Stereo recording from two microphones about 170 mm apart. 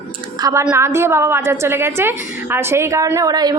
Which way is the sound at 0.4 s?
20° right (ahead or behind).